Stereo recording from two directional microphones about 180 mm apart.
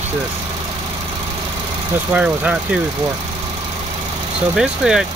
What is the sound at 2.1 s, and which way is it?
Speech, 10° right (ahead or behind).